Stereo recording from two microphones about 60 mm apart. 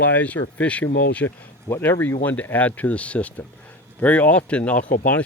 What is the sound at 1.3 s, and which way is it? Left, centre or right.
Speech, left.